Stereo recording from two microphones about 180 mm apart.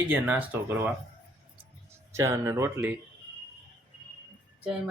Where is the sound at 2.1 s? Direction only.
15° right (ahead or behind).